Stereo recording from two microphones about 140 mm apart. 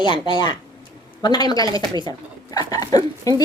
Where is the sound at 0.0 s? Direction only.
30° left (ahead or behind).